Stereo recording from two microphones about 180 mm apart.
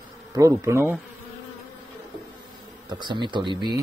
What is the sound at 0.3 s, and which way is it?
Speech, 20° right (ahead or behind).